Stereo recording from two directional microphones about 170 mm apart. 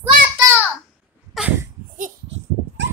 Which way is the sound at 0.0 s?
15° right (ahead or behind).